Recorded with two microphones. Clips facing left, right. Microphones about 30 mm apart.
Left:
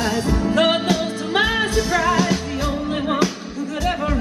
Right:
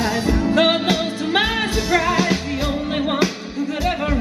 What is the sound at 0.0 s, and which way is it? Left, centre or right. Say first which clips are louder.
Music: right 1 dB; centre.